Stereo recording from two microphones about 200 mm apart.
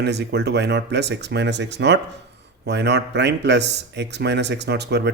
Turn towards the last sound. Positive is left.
turn(degrees=-60)  # may be behind; listen again after turning